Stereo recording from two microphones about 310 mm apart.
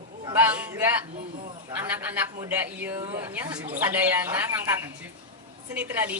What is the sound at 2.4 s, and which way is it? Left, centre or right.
A woman's voice, centre.